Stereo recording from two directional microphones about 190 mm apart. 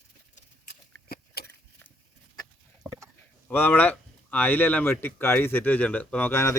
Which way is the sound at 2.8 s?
10° right (ahead or behind).